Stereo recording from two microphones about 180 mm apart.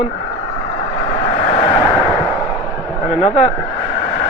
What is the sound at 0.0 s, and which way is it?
Speech, 50° left (ahead or behind).